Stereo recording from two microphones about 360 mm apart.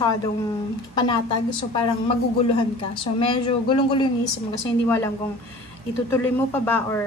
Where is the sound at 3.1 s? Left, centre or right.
Centre.